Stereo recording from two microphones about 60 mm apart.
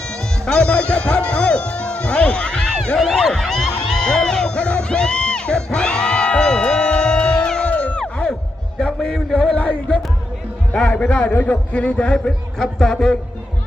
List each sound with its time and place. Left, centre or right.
0.1 s music: centre
3.0 s a sound: centre
7.7 s music: left
8.8 s a sound: centre
10.8 s a man's voice: centre
11.3 s a man's voice: left; by 13.1 s centre